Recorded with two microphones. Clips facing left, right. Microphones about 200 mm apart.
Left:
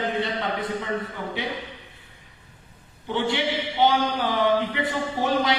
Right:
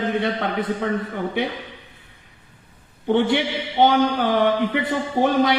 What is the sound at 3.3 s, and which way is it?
Speech, 55° right (ahead or behind).